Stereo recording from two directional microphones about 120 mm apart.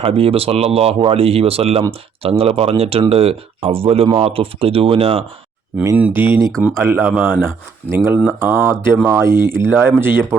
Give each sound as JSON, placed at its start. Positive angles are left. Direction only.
{"t": 0.0, "sound": "speech", "side_deg": -55}
{"t": 6.0, "sound": "speech", "side_deg": -20}